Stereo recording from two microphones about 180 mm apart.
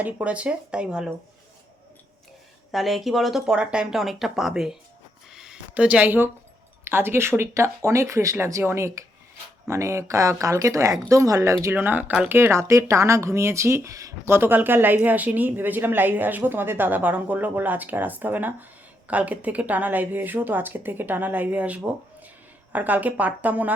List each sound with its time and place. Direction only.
0.0 s speech: 5° right (ahead or behind)
2.7 s speech: centre (ahead or behind)
5.3 s a sound: 5° right (ahead or behind)
6.8 s speech: 15° right (ahead or behind)